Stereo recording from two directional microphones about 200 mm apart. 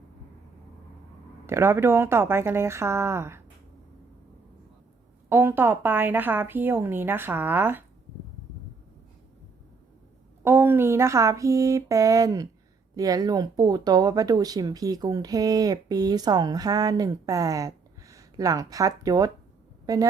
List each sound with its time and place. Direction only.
1.5 s speech: 10° right (ahead or behind)
5.3 s speech: 10° right (ahead or behind)
10.4 s a woman's voice: 10° right (ahead or behind)